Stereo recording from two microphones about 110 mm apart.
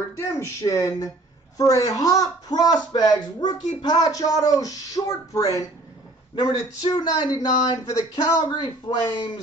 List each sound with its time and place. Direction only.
0.4 s speech: 30° left (ahead or behind)
8.5 s speech: 45° left (ahead or behind)